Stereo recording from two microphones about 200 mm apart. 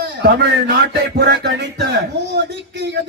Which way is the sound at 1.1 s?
55° right (ahead or behind).